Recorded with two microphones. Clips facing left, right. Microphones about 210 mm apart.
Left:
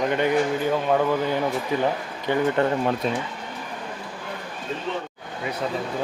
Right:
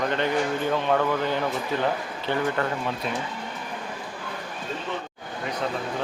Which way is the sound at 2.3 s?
20° left (ahead or behind).